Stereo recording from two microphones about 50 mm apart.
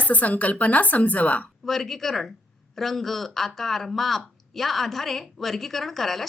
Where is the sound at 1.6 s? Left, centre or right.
Centre.